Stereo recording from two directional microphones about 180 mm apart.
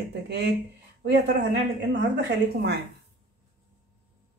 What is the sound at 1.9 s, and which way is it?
Speech, 70° right (ahead or behind).